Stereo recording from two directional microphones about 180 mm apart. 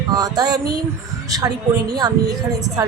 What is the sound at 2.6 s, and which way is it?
Music, 20° right (ahead or behind).